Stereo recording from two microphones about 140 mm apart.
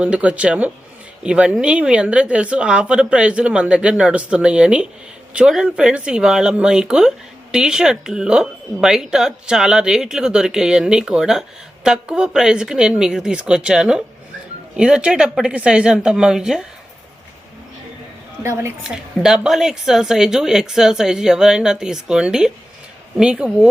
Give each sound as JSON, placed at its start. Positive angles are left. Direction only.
{"t": 0.0, "sound": "speech", "side_deg": -10}
{"t": 18.4, "sound": "a woman's voice", "side_deg": -20}
{"t": 18.8, "sound": "speech", "side_deg": -5}